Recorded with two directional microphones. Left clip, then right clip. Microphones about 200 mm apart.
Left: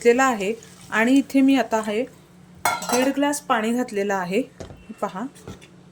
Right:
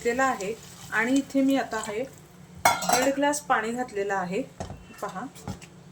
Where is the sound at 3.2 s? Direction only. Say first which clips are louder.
Left 3 dB; 45° left (ahead or behind).